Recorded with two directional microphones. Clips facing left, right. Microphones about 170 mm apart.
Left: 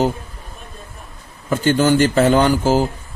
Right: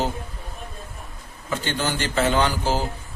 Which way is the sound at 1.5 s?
45° left (ahead or behind).